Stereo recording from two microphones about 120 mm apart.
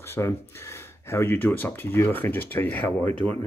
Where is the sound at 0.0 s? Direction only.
20° left (ahead or behind).